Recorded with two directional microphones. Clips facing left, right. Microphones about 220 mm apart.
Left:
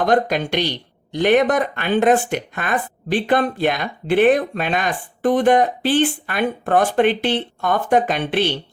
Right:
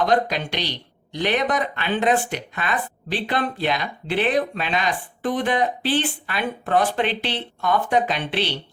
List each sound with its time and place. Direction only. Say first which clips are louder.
0.0 s speech: left 3 dB; 50° left (ahead or behind)